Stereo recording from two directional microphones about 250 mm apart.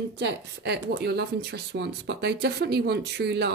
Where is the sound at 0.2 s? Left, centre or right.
Right.